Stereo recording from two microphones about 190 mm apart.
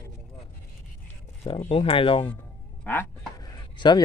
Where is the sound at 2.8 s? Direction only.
10° left (ahead or behind).